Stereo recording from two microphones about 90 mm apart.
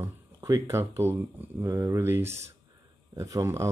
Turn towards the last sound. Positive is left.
turn(degrees=-35)  # may be behind; listen again after turning